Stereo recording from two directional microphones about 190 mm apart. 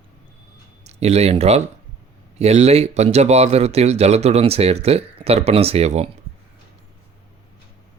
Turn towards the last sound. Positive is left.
turn(degrees=-35)  # may be behind; listen again after turning